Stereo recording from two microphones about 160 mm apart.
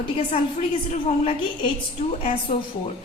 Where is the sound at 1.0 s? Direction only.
40° left (ahead or behind).